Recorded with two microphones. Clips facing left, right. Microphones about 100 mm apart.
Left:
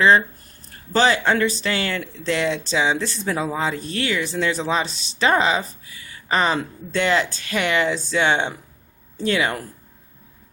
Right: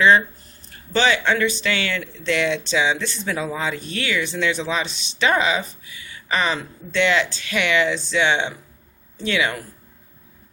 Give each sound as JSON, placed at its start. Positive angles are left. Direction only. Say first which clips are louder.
{"t": 0.9, "sound": "speech", "louder": "left 1 dB", "side_deg": 40}